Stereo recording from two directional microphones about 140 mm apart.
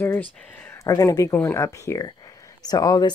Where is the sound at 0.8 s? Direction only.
25° left (ahead or behind).